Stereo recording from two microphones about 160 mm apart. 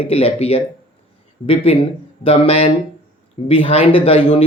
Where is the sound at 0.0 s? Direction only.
40° left (ahead or behind).